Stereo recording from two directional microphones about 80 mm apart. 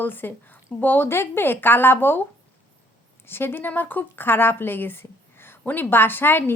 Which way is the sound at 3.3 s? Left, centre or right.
Left.